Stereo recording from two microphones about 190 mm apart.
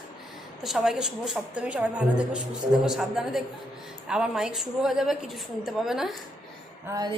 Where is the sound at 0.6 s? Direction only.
Centre (ahead or behind).